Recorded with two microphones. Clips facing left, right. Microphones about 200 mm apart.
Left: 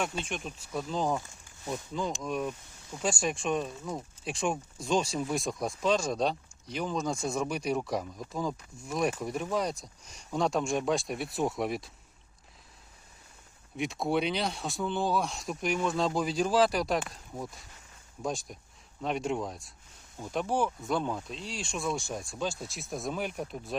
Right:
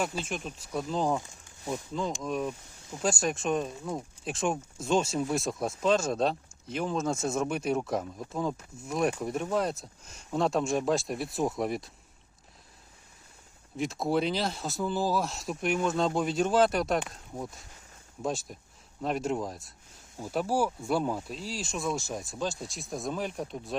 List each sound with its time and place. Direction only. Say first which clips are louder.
0.0 s speech: right 1 dB; 5° right (ahead or behind)
13.7 s speech: right 1 dB; centre (ahead or behind)